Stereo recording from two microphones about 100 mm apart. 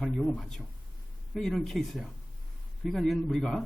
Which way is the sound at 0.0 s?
Centre (ahead or behind).